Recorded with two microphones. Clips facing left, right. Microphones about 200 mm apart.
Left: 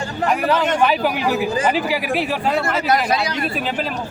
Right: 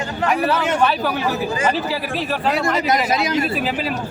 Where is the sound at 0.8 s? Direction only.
15° left (ahead or behind).